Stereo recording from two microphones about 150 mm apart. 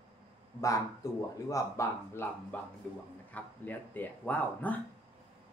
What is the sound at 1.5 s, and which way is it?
Speech, 20° left (ahead or behind).